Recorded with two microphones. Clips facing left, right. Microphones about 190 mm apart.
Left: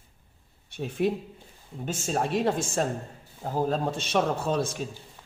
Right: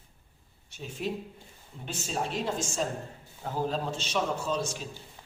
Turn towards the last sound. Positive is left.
turn(degrees=55)  # may be behind; listen again after turning